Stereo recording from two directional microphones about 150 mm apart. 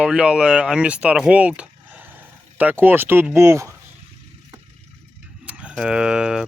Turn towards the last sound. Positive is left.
turn(degrees=-5)  # may be behind; listen again after turning